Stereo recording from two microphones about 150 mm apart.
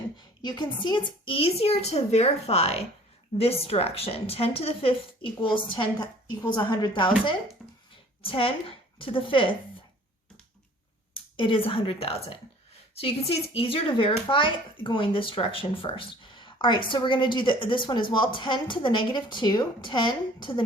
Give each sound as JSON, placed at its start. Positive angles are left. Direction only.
{"t": 0.4, "sound": "speech", "side_deg": 30}
{"t": 7.6, "sound": "a sound", "side_deg": 0}
{"t": 8.2, "sound": "a woman's voice", "side_deg": 40}
{"t": 11.1, "sound": "speech", "side_deg": 35}